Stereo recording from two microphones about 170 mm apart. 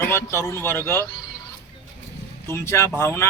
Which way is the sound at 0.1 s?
15° left (ahead or behind).